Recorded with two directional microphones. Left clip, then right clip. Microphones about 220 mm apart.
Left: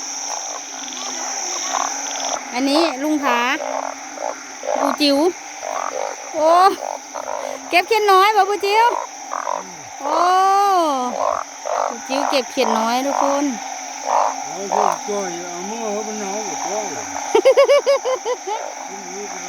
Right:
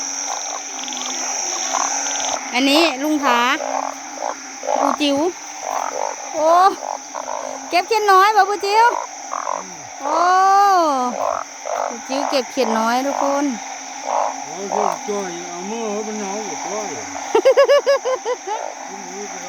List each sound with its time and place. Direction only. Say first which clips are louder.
2.5 s speech: right 3 dB; centre (ahead or behind)
4.7 s frog: right 1 dB; 20° right (ahead or behind)
4.9 s speech: left 2 dB; 10° left (ahead or behind)
6.4 s speech: even; 10° left (ahead or behind)
10.0 s a sound: right 1 dB; centre (ahead or behind)
11.2 s speech: left 1 dB; 10° left (ahead or behind)
14.1 s frog: left 3 dB; 10° left (ahead or behind)
14.7 s speech: left 2 dB; 5° left (ahead or behind)
17.3 s speech: even; centre (ahead or behind)